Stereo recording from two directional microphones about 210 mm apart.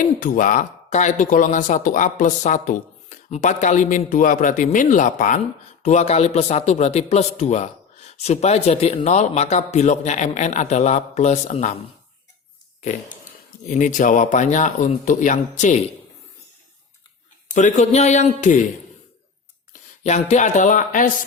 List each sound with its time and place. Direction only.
0.0 s speech: 40° left (ahead or behind)
13.7 s speech: 35° left (ahead or behind)
17.5 s speech: 35° left (ahead or behind)
20.1 s speech: 35° left (ahead or behind)